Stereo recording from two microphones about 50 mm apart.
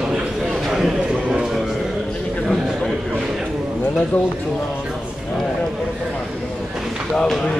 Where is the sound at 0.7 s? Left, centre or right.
Centre.